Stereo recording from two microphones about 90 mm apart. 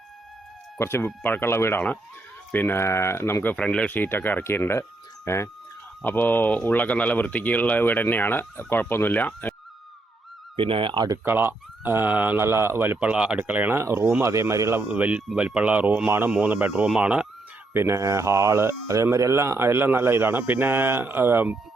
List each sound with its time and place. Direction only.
0.8 s speech: 30° left (ahead or behind)
3.5 s speech: 15° left (ahead or behind); by 5.5 s 30° left (ahead or behind)
6.0 s speech: 20° left (ahead or behind)
10.6 s speech: 75° right (ahead or behind)
11.3 s speech: 25° right (ahead or behind)
13.0 s speech: 15° right (ahead or behind); by 14.8 s 30° right (ahead or behind)
14.8 s speech: 15° right (ahead or behind)
17.7 s speech: 30° right (ahead or behind)